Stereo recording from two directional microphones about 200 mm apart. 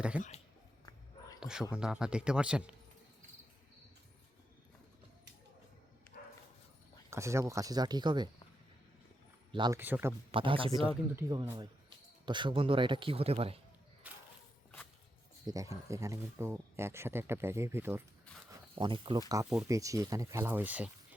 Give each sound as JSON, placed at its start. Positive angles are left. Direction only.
{"t": 0.1, "sound": "speech", "side_deg": -5}
{"t": 1.4, "sound": "a sound", "side_deg": -5}
{"t": 1.7, "sound": "speech", "side_deg": -5}
{"t": 7.1, "sound": "speech", "side_deg": -15}
{"t": 9.5, "sound": "speech", "side_deg": -20}
{"t": 9.7, "sound": "speech", "side_deg": -10}
{"t": 10.3, "sound": "speech", "side_deg": -25}
{"t": 10.8, "sound": "speech", "side_deg": -10}
{"t": 12.2, "sound": "speech", "side_deg": -25}
{"t": 14.0, "sound": "walk", "side_deg": -10}
{"t": 15.4, "sound": "speech", "side_deg": -15}
{"t": 18.8, "sound": "speech", "side_deg": -25}